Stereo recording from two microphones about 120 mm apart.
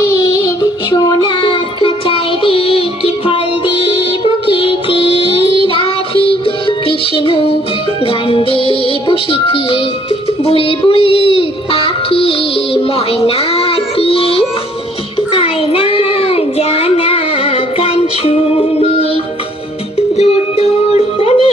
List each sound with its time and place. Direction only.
0.6 s music: 30° left (ahead or behind); by 14.4 s 50° left (ahead or behind)
15.3 s child singing: 50° left (ahead or behind)
20.0 s music: 60° left (ahead or behind)